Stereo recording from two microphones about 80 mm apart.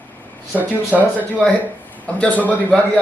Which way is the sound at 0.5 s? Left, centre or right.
Left.